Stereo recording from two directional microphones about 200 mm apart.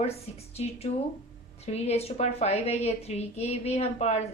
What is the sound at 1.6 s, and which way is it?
A woman's voice, 30° left (ahead or behind).